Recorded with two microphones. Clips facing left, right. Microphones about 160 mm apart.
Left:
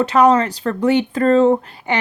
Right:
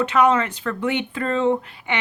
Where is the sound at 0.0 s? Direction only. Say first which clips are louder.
Left 5 dB; 35° left (ahead or behind).